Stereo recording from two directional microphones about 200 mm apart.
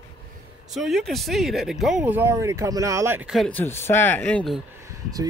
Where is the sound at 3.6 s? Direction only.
10° left (ahead or behind).